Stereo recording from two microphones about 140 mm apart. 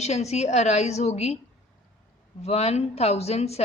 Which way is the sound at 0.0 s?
50° left (ahead or behind).